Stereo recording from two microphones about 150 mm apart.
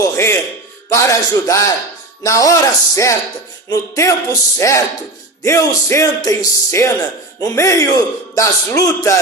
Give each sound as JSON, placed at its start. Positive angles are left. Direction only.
{"t": 0.0, "sound": "music", "side_deg": 20}
{"t": 0.9, "sound": "speech", "side_deg": 20}